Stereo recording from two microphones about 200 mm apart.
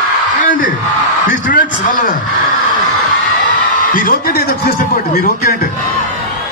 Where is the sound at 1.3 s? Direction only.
45° left (ahead or behind).